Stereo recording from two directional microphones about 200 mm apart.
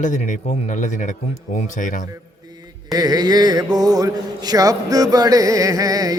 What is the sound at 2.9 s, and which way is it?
Mantra, 20° right (ahead or behind).